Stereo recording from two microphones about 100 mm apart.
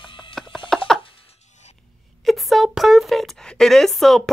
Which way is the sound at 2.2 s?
Centre (ahead or behind).